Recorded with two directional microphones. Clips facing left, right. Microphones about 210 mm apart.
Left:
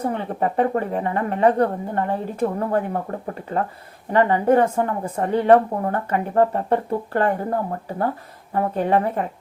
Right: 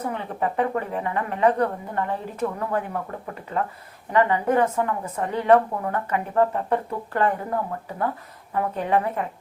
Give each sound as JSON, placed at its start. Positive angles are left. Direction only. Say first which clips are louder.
{"t": 0.0, "sound": "speech", "louder": "left 4 dB", "side_deg": 35}